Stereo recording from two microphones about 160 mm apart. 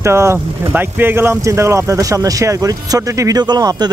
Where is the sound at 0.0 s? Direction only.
15° right (ahead or behind).